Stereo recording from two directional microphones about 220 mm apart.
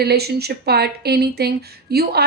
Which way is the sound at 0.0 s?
45° right (ahead or behind).